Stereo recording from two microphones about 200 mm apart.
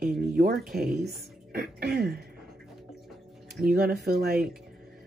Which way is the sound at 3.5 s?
50° right (ahead or behind).